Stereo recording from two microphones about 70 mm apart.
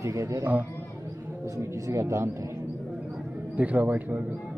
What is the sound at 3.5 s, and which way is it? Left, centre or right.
Speech, right.